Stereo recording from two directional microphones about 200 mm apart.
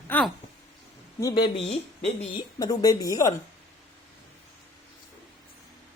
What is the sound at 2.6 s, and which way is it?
Speech, 20° left (ahead or behind).